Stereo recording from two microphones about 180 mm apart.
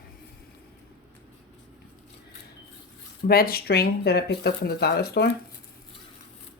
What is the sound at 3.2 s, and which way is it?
Speech, 55° left (ahead or behind).